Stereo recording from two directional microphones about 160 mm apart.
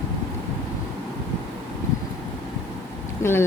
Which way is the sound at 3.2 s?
15° left (ahead or behind).